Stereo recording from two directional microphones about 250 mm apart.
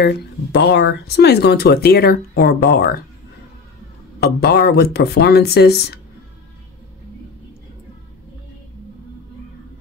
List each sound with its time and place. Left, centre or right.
0.0 s speech: left
4.2 s speech: left